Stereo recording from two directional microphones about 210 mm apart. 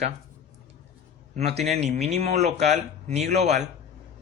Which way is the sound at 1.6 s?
30° right (ahead or behind).